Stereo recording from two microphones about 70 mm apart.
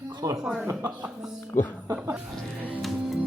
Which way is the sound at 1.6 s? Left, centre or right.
Left.